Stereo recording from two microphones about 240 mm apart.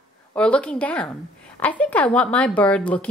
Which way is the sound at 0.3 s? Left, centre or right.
Centre.